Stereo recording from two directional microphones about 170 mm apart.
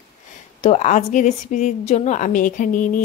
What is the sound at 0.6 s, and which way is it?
Speech, 40° left (ahead or behind).